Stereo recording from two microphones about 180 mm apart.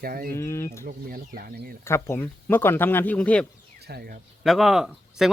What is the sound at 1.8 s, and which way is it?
Speech, 15° left (ahead or behind).